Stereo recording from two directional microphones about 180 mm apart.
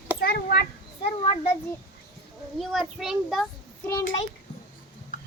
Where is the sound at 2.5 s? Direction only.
Centre (ahead or behind).